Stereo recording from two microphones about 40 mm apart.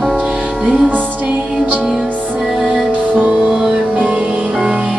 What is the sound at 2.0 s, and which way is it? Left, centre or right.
Music, right.